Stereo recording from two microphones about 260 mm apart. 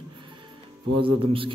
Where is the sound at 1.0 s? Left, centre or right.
Right.